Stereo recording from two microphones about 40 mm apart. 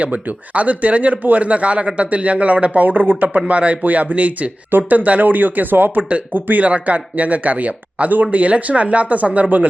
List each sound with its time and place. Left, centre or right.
0.0 s speech: right
2.8 s speech: right
6.7 s speech: right